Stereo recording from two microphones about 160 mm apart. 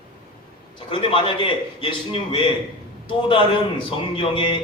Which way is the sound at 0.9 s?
35° left (ahead or behind).